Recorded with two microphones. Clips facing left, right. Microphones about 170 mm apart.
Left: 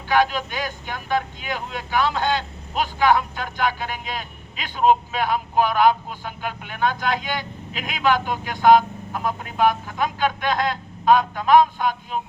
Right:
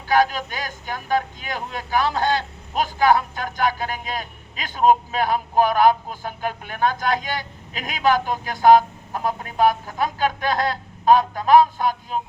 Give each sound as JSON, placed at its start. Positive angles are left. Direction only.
{"t": 0.1, "sound": "speech", "side_deg": -40}